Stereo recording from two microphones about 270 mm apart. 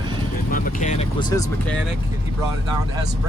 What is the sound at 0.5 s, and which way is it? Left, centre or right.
Vehicle, left.